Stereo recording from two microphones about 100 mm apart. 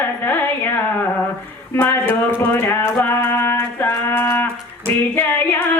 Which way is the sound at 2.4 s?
20° left (ahead or behind).